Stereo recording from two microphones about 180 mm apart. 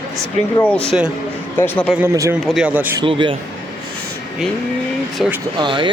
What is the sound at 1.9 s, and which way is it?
Speech, 15° right (ahead or behind).